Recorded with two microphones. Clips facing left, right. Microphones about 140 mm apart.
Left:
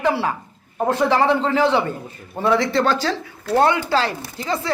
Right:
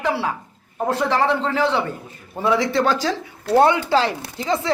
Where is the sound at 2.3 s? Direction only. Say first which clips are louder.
Left 1 dB; 10° right (ahead or behind).